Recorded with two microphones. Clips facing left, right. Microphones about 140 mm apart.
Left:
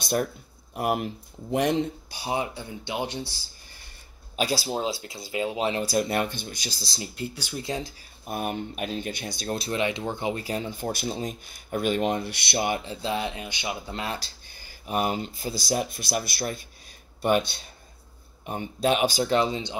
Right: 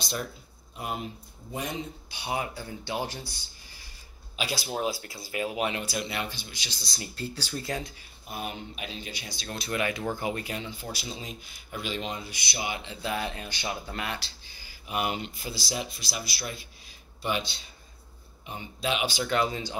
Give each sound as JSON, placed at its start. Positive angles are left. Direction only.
{"t": 0.0, "sound": "speech", "side_deg": 55}
{"t": 0.7, "sound": "speech", "side_deg": 65}
{"t": 2.0, "sound": "speech", "side_deg": 40}
{"t": 2.3, "sound": "speech", "side_deg": 20}
{"t": 4.4, "sound": "speech", "side_deg": 35}
{"t": 4.7, "sound": "speech", "side_deg": 25}
{"t": 7.2, "sound": "speech", "side_deg": 15}
{"t": 8.3, "sound": "speech", "side_deg": 50}
{"t": 10.8, "sound": "speech", "side_deg": 50}
{"t": 12.9, "sound": "speech", "side_deg": 25}
{"t": 14.0, "sound": "speech", "side_deg": 35}
{"t": 14.5, "sound": "speech", "side_deg": 50}